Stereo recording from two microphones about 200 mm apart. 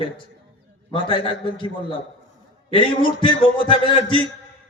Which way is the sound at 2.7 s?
25° left (ahead or behind).